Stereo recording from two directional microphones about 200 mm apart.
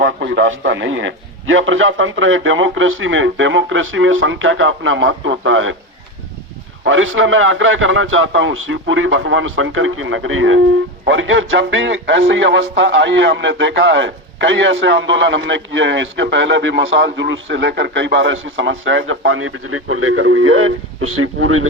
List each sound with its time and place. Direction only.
0.0 s speech: 65° right (ahead or behind)
6.8 s speech: 80° right
11.0 s speech: 70° right (ahead or behind); by 21.7 s 90° right